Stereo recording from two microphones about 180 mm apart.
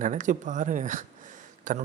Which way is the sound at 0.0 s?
45° right (ahead or behind).